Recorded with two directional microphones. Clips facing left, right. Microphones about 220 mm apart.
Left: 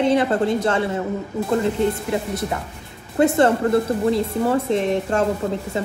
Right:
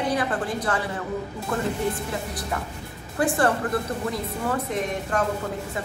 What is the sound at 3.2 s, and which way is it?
A woman's voice, 25° left (ahead or behind).